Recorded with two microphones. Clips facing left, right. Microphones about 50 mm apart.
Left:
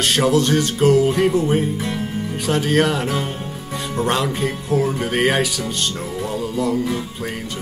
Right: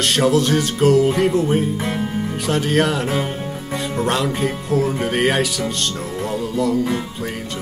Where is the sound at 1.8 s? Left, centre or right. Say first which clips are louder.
Right 2 dB; right.